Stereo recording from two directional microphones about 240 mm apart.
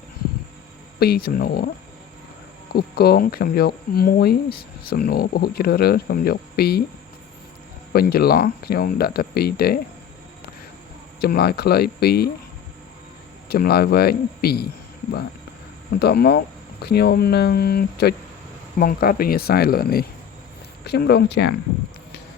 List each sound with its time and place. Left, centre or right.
0.9 s speech: left
2.7 s speech: left
7.9 s speech: left
11.2 s speech: left
13.5 s speech: left
16.0 s speech: left